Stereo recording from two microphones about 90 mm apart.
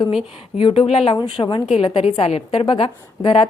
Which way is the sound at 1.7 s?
85° left.